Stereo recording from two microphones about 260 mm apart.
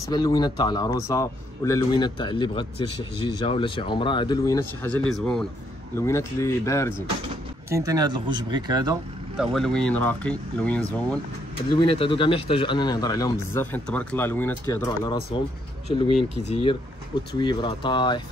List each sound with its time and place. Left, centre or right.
0.0 s speech: centre
7.7 s speech: centre
9.4 s speech: centre
11.8 s speech: centre